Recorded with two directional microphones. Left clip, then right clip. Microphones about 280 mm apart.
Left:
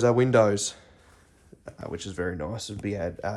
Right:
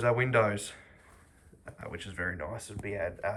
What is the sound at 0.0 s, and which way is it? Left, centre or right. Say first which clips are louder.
Speech: left 6 dB; centre.